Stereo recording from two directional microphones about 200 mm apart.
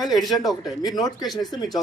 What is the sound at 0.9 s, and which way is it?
Speech, 20° left (ahead or behind).